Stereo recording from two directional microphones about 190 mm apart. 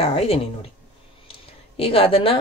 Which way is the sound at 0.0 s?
30° left (ahead or behind).